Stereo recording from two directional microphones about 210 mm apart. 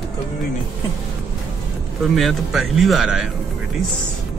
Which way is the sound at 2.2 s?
Centre (ahead or behind).